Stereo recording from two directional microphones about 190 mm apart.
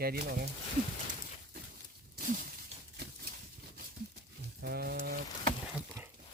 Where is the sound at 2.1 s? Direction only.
45° right (ahead or behind).